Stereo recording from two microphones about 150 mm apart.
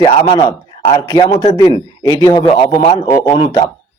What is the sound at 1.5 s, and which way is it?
Speech, 25° left (ahead or behind).